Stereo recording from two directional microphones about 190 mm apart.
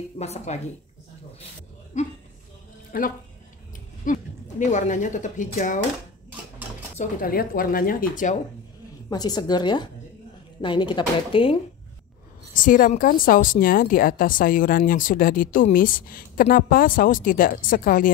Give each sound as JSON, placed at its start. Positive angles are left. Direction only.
{"t": 0.2, "sound": "speech", "side_deg": 35}
{"t": 2.0, "sound": "speech", "side_deg": 35}
{"t": 2.9, "sound": "a woman's voice", "side_deg": 50}
{"t": 7.0, "sound": "a woman's voice", "side_deg": 50}
{"t": 9.1, "sound": "speech", "side_deg": 20}
{"t": 12.5, "sound": "a woman's voice", "side_deg": 45}